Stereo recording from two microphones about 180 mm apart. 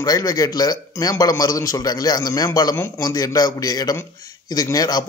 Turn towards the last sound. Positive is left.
turn(degrees=20)  # may be behind; listen again after turning